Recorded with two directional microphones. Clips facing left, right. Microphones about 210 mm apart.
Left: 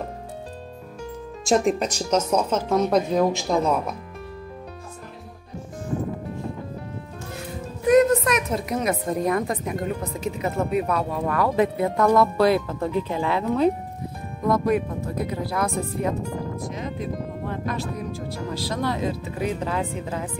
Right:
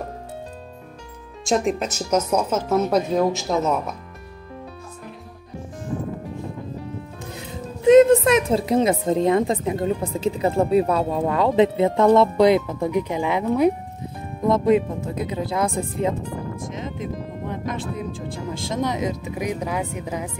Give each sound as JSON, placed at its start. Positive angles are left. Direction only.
{"t": 1.4, "sound": "speech", "side_deg": 0}
{"t": 7.3, "sound": "speech", "side_deg": -25}